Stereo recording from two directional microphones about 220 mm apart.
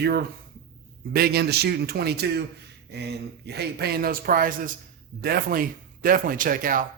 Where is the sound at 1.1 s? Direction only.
45° right (ahead or behind).